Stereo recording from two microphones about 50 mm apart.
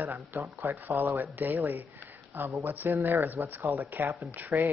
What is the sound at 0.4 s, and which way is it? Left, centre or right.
Speech, right.